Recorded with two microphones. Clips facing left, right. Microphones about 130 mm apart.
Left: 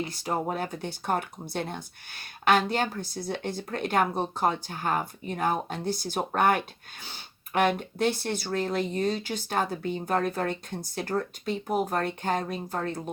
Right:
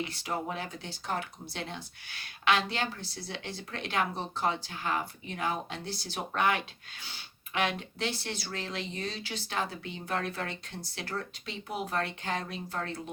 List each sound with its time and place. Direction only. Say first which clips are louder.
0.0 s speech: left 5 dB; 40° left (ahead or behind)